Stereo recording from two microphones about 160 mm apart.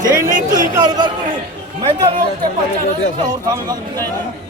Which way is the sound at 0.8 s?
25° right (ahead or behind).